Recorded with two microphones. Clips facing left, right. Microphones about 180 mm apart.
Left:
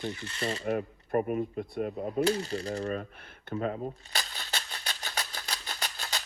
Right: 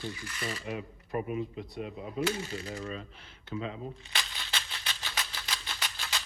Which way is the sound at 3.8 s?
40° left (ahead or behind).